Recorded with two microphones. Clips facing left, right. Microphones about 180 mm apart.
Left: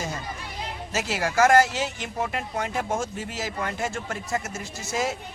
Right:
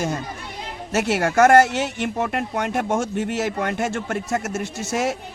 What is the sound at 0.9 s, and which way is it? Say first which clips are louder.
A man's voice: right 6 dB; 65° right (ahead or behind).